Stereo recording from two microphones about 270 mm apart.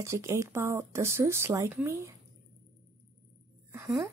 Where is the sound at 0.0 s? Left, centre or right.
Centre.